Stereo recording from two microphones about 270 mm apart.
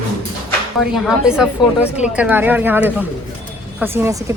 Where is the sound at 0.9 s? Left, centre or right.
Centre.